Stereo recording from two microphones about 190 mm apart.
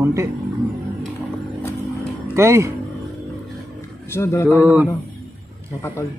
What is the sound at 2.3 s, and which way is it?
Speech, 15° right (ahead or behind).